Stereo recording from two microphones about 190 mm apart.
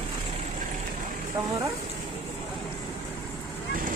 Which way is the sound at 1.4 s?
15° right (ahead or behind).